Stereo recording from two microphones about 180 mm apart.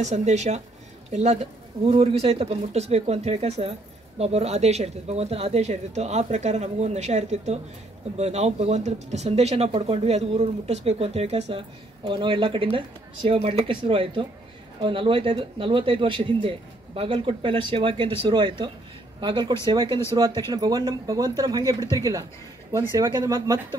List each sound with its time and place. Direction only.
0.0 s a woman's voice: 40° right (ahead or behind); by 23.6 s 20° right (ahead or behind)